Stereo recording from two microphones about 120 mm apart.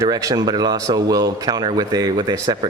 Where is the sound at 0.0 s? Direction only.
30° right (ahead or behind).